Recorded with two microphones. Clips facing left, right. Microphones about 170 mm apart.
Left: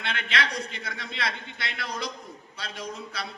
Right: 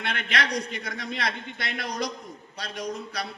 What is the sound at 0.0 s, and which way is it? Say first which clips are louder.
A man's voice: right 1 dB; 55° right (ahead or behind).